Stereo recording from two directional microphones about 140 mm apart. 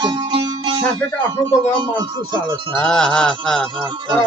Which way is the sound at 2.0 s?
35° right (ahead or behind).